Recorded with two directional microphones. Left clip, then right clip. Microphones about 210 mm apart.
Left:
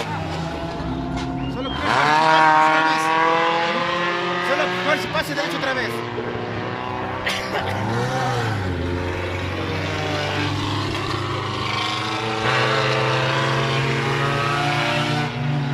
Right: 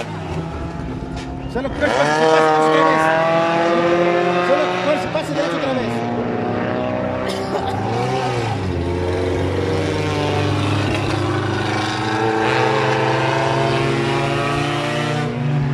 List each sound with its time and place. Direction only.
2.0 s a sound: 30° right (ahead or behind)
2.7 s vehicle: 45° right (ahead or behind)
12.2 s vehicle: 45° right (ahead or behind)